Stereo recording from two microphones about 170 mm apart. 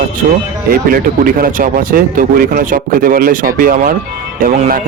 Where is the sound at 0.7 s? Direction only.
60° right (ahead or behind).